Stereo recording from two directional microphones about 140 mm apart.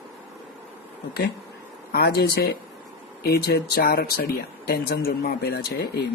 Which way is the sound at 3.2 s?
90° left.